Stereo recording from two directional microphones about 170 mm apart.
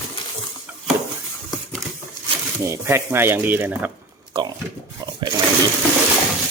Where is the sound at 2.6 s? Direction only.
15° right (ahead or behind).